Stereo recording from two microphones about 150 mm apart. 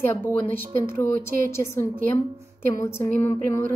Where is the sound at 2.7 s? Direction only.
20° left (ahead or behind).